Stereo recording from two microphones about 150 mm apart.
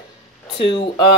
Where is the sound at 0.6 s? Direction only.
35° left (ahead or behind).